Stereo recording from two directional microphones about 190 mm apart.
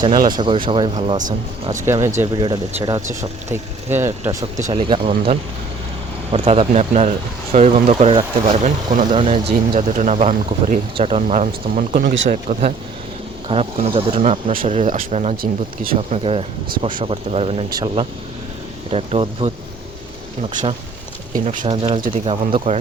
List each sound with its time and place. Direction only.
0.3 s speech: 25° right (ahead or behind)
4.7 s speech: 25° right (ahead or behind)
15.4 s speech: 50° right (ahead or behind)
16.0 s speech: 35° right (ahead or behind)
21.3 s speech: 45° right (ahead or behind)
21.8 s speech: 25° right (ahead or behind)